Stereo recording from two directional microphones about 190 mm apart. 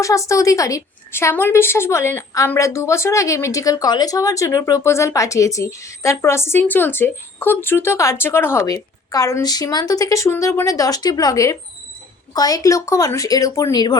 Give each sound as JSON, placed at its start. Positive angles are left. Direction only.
{"t": 0.0, "sound": "a woman's voice", "side_deg": 15}